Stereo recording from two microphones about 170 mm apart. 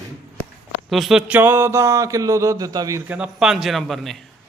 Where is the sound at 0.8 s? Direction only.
Centre (ahead or behind); by 3.0 s 20° right (ahead or behind).